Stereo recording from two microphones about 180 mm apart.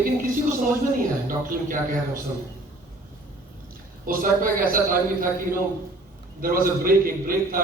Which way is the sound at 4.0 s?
50° right (ahead or behind).